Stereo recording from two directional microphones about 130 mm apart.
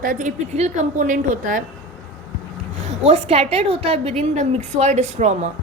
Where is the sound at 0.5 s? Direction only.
60° right (ahead or behind); by 1.6 s 80° right.